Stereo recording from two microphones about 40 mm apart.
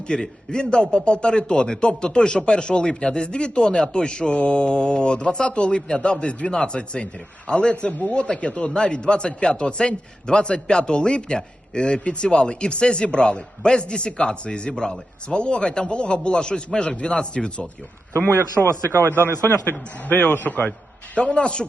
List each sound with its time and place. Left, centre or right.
0.1 s a man's voice: left
18.3 s a man's voice: right
19.5 s a man's voice: left
21.2 s a man's voice: left